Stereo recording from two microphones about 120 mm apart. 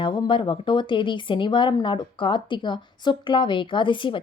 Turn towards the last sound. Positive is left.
turn(degrees=45)  # may be behind; listen again after turning